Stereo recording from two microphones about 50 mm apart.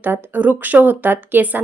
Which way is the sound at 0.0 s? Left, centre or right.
Right.